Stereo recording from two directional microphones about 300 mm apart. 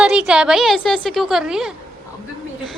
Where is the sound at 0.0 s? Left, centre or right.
Centre.